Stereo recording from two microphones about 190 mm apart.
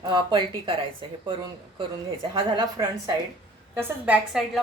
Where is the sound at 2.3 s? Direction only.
25° right (ahead or behind).